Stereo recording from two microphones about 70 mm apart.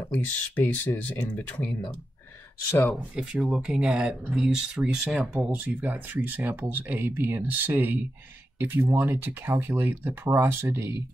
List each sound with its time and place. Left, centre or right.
0.1 s speech: left
3.2 s speech: centre
5.3 s speech: centre; by 11.0 s right